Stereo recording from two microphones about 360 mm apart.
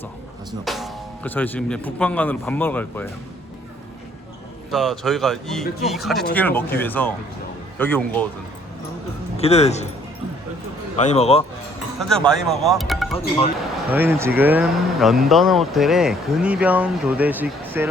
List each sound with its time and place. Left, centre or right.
0.6 s speech: centre
4.7 s speech: centre
9.4 s speech: centre
10.9 s speech: centre
11.9 s speech: centre